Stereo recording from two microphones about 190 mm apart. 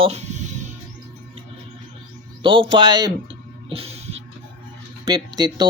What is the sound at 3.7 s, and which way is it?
Music, 30° right (ahead or behind).